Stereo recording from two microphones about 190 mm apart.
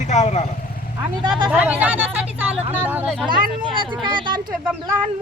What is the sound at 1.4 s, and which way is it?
Speech, 10° right (ahead or behind).